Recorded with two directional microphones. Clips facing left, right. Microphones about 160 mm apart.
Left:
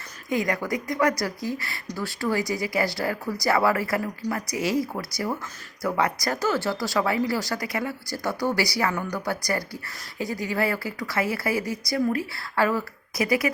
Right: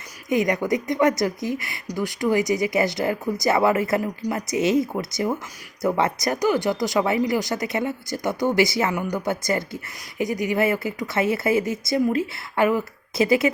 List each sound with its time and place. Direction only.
0.3 s speech: 20° right (ahead or behind)